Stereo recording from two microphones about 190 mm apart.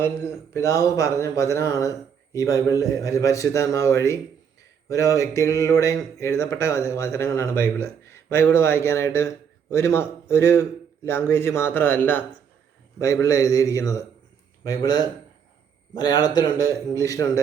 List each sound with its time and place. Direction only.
0.0 s a man's voice: 15° left (ahead or behind)